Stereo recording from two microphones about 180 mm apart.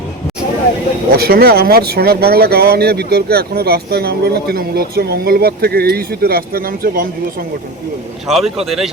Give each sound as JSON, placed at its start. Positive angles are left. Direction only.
{"t": 1.1, "sound": "speech", "side_deg": -60}
{"t": 8.3, "sound": "speech", "side_deg": 0}